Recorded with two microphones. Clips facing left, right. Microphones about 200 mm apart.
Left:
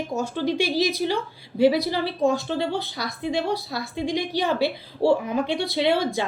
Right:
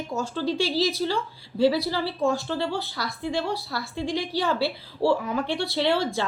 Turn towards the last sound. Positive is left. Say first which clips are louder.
# left 2 dB
turn(degrees=15)  # may be behind; listen again after turning